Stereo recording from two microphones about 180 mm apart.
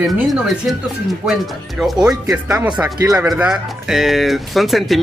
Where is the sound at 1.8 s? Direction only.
Centre (ahead or behind).